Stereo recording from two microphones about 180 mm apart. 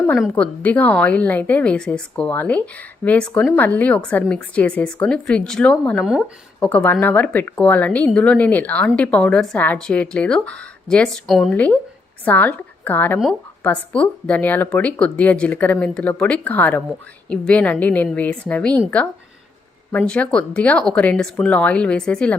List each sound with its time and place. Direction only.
0.2 s speech: 5° left (ahead or behind)
6.1 s speech: 5° right (ahead or behind)
6.7 s a woman's voice: 10° left (ahead or behind)
19.9 s speech: 5° left (ahead or behind)